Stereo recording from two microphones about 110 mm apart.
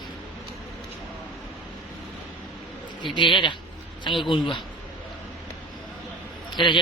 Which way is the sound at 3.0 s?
45° left (ahead or behind).